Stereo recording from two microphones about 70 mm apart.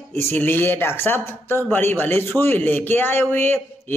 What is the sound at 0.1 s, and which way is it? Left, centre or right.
A man's voice, left.